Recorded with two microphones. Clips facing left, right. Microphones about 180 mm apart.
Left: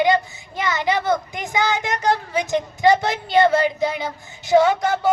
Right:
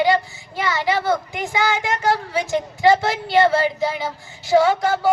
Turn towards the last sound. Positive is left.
turn(degrees=20)  # may be behind; listen again after turning